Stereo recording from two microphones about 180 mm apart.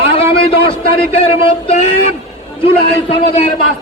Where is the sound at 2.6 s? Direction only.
30° left (ahead or behind).